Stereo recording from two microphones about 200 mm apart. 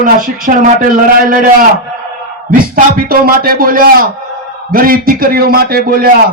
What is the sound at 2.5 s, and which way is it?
Speech, 45° right (ahead or behind).